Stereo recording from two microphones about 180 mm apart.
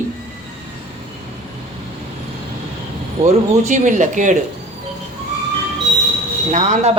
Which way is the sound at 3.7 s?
45° right (ahead or behind).